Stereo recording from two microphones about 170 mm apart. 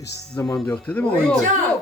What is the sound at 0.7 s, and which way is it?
Speech, 10° left (ahead or behind).